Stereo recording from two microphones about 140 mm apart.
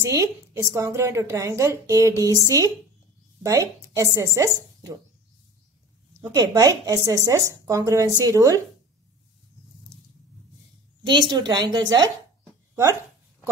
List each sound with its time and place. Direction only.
0.0 s speech: 20° right (ahead or behind)
6.3 s speech: 25° right (ahead or behind)
11.1 s speech: 30° right (ahead or behind)